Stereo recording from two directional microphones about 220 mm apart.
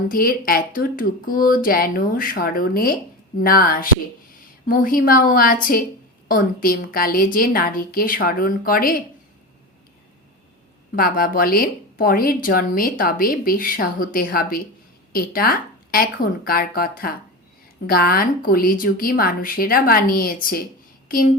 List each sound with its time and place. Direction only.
0.1 s a woman's voice: 40° left (ahead or behind)
10.9 s a woman's voice: 40° left (ahead or behind)